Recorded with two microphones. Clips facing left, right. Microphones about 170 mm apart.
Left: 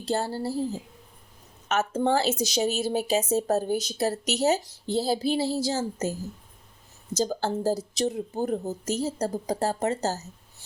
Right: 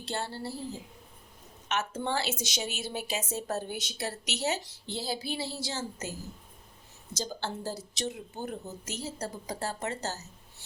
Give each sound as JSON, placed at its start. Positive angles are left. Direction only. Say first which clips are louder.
{"t": 0.0, "sound": "a woman's voice", "louder": "left 8 dB", "side_deg": 40}
{"t": 7.2, "sound": "a woman's voice", "louder": "left 9 dB", "side_deg": 40}